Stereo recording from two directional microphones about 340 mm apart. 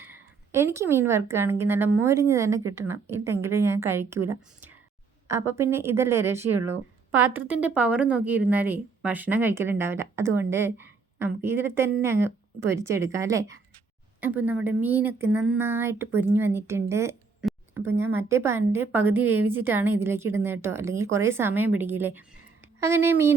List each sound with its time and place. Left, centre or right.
0.0 s a woman's voice: centre